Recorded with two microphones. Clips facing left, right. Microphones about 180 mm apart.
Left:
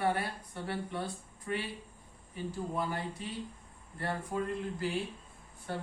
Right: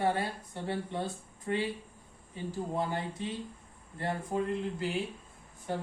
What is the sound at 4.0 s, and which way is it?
Speech, 20° right (ahead or behind).